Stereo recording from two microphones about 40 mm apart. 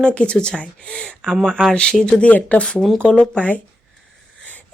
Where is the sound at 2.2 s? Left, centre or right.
Left.